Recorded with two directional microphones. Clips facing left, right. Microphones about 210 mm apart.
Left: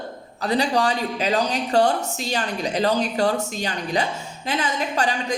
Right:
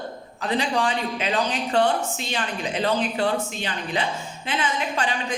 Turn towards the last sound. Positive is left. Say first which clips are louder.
# left 3 dB
turn(degrees=40)  # may be behind; listen again after turning